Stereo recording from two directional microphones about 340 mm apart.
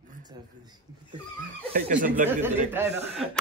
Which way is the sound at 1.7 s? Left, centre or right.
Right.